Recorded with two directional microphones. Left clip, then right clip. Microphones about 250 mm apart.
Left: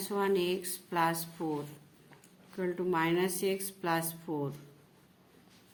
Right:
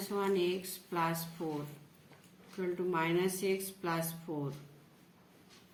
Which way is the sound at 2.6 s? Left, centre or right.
Left.